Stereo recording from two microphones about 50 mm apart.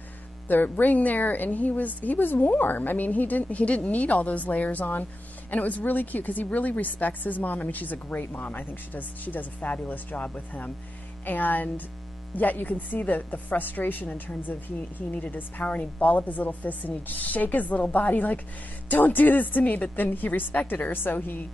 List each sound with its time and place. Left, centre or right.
0.5 s a woman's voice: left